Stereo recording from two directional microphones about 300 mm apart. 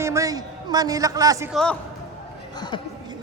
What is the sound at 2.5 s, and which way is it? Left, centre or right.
Speech, centre.